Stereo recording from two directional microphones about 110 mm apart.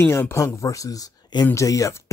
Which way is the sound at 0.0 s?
20° left (ahead or behind).